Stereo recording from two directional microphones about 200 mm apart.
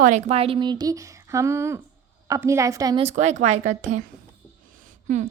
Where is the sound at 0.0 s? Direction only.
35° right (ahead or behind); by 3.0 s 15° right (ahead or behind).